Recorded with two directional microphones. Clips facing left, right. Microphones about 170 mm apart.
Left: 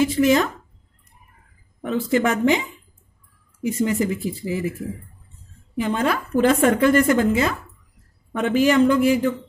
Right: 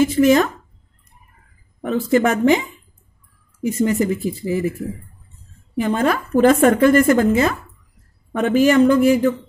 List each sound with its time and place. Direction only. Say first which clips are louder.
0.0 s a woman's voice: right 3 dB; 45° right (ahead or behind)
1.8 s a woman's voice: right 4 dB; 45° right (ahead or behind)
3.6 s a woman's voice: right 3 dB; 45° right (ahead or behind)
5.8 s a woman's voice: right 3 dB; 45° right (ahead or behind)